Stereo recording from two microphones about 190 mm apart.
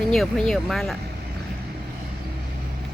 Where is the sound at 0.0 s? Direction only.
5° left (ahead or behind).